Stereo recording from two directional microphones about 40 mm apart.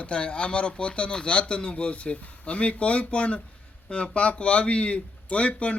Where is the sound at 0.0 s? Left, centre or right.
Left.